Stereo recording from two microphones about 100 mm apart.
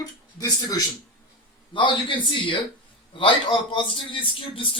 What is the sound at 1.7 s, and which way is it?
A man's voice, 55° left (ahead or behind).